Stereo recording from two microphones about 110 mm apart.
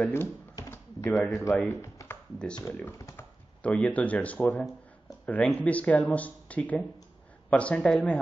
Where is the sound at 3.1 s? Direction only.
10° left (ahead or behind).